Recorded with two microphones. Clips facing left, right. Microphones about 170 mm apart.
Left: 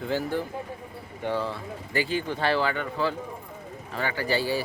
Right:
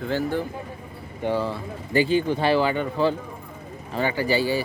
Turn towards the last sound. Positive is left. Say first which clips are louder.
# right 4 dB
turn(degrees=0)  # may be behind; listen again after turning